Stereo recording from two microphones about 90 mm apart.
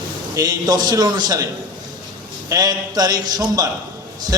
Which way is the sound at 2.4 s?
45° right (ahead or behind).